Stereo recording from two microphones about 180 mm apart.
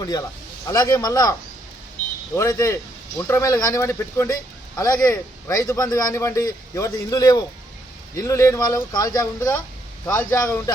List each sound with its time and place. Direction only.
0.7 s speech: 20° left (ahead or behind)